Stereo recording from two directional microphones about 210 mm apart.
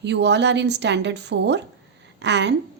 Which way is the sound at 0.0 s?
55° right (ahead or behind).